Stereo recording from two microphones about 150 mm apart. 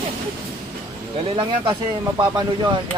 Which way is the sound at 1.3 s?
35° right (ahead or behind).